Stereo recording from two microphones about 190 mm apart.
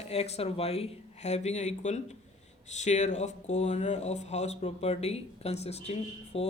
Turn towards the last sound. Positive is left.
turn(degrees=35)  # may be behind; listen again after turning